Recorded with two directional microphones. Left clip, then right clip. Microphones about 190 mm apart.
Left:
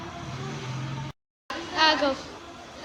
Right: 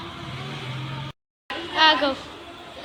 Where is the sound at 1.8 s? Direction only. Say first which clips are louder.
Right 4 dB; 5° left (ahead or behind).